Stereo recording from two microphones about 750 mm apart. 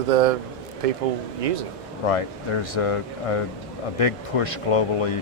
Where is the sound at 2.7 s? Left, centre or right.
Left.